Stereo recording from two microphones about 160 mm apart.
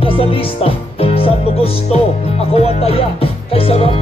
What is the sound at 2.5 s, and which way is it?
Speech, 40° left (ahead or behind).